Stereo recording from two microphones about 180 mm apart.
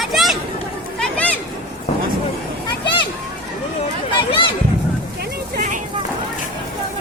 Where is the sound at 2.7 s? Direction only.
25° left (ahead or behind).